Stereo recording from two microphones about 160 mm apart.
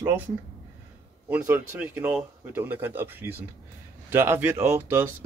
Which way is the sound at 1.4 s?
15° right (ahead or behind).